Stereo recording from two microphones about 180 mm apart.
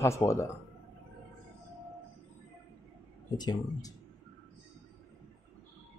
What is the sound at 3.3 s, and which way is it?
Speech, 20° left (ahead or behind).